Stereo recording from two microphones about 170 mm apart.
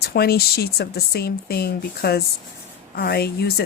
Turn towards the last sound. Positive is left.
turn(degrees=70)  # may be behind; listen again after turning